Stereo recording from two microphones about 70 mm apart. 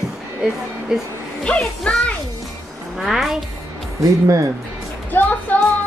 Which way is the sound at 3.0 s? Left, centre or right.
Centre.